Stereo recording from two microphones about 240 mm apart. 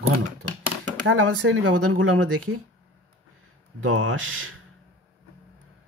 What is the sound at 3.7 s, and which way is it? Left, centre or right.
Speech, right.